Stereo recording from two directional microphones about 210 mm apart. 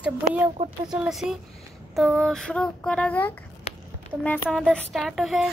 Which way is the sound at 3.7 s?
30° left (ahead or behind).